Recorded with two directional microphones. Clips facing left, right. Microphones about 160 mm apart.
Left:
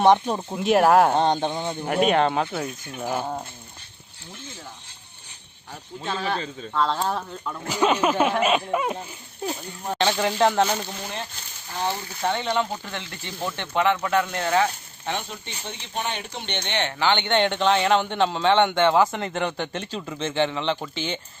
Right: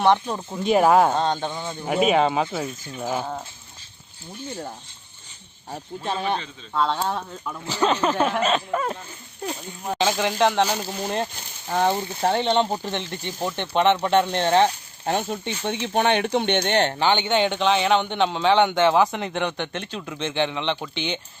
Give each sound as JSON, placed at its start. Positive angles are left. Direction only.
{"t": 0.0, "sound": "speech", "side_deg": 20}
{"t": 0.6, "sound": "a man's voice", "side_deg": 0}
{"t": 1.1, "sound": "speech", "side_deg": 20}
{"t": 1.8, "sound": "a man's voice", "side_deg": 0}
{"t": 5.7, "sound": "speech", "side_deg": -25}
{"t": 6.7, "sound": "a man's voice", "side_deg": 0}
{"t": 11.7, "sound": "speech", "side_deg": -55}
{"t": 12.2, "sound": "speech", "side_deg": -30}
{"t": 15.0, "sound": "speech", "side_deg": -45}
{"t": 15.4, "sound": "speech", "side_deg": -65}
{"t": 17.0, "sound": "a man's voice", "side_deg": -10}